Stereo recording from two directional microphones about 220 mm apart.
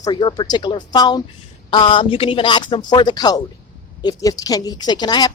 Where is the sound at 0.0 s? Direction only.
20° left (ahead or behind).